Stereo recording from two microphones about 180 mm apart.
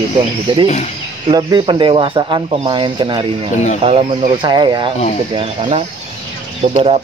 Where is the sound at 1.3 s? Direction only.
25° right (ahead or behind).